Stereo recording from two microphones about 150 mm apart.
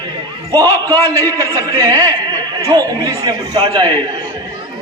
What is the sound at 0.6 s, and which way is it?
Speech, 15° left (ahead or behind).